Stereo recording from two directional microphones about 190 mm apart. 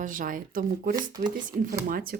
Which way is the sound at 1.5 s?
50° right (ahead or behind).